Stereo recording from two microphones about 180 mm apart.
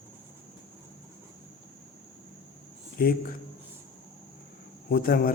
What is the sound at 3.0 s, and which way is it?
Speech, 55° left (ahead or behind).